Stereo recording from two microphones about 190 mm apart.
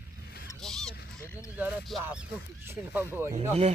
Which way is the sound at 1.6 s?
5° right (ahead or behind).